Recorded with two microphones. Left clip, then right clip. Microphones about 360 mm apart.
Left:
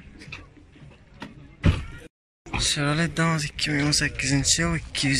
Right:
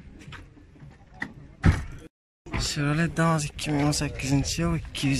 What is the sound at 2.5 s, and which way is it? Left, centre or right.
Speech, centre.